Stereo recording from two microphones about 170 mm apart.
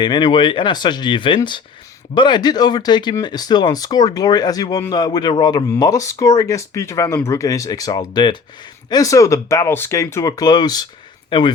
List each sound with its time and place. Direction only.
0.0 s speech: 25° left (ahead or behind)